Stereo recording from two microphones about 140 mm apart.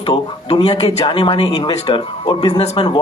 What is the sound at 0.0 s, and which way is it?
Speech, 40° left (ahead or behind).